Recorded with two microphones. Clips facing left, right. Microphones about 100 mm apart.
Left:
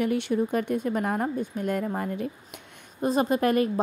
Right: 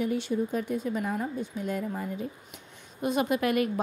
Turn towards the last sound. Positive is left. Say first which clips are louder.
# left 3 dB
turn(degrees=35)  # may be behind; listen again after turning